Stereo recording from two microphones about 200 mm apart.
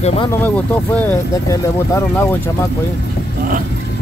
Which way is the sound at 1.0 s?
10° left (ahead or behind).